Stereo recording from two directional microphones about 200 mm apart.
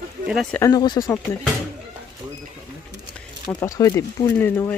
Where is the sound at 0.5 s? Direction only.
15° left (ahead or behind).